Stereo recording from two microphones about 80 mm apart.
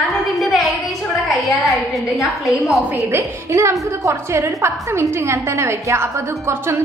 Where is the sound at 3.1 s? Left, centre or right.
Right.